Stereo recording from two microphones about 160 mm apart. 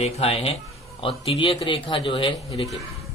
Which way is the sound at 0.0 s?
40° left (ahead or behind).